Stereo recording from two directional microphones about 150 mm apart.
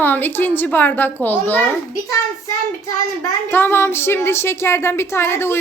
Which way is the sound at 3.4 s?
15° left (ahead or behind).